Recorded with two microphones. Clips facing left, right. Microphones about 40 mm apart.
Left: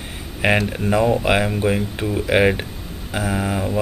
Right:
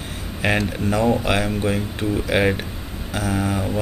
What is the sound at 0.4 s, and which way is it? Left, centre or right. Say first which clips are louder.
Speech: left 3 dB; centre.